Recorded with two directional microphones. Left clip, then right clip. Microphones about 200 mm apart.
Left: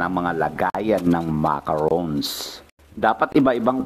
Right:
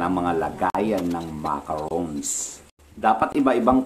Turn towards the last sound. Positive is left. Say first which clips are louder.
# left 1 dB
turn(degrees=35)  # may be behind; listen again after turning